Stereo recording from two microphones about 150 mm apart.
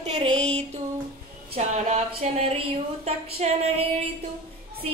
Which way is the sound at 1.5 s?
50° right (ahead or behind).